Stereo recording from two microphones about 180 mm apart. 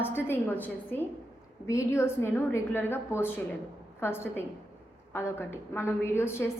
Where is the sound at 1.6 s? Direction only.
15° left (ahead or behind).